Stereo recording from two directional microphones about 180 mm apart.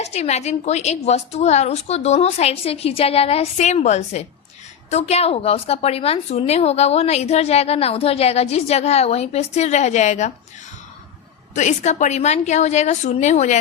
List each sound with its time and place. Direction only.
0.0 s a woman's voice: 40° left (ahead or behind)
11.5 s a woman's voice: 40° left (ahead or behind)